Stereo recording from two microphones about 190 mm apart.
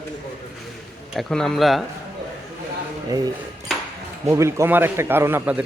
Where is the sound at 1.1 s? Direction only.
Centre (ahead or behind).